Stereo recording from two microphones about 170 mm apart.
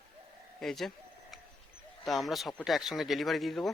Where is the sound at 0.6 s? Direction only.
Centre (ahead or behind).